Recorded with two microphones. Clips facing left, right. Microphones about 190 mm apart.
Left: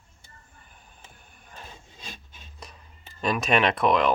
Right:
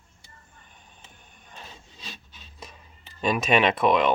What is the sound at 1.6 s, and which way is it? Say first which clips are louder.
Filing: left 1 dB; 50° left (ahead or behind).